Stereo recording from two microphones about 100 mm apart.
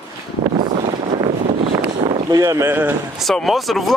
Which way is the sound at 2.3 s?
35° right (ahead or behind).